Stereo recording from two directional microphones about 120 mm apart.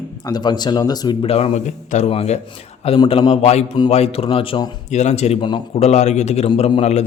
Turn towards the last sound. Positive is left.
turn(degrees=45)  # may be behind; listen again after turning